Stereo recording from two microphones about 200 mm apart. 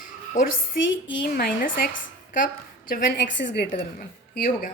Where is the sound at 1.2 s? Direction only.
45° left (ahead or behind).